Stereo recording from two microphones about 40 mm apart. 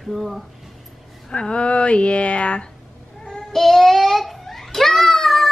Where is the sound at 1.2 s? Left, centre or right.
Left.